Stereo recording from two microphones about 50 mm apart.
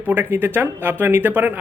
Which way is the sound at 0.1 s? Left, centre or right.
Right.